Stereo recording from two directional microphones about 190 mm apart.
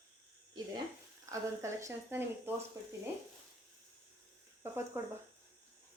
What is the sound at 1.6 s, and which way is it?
Speech, 15° right (ahead or behind).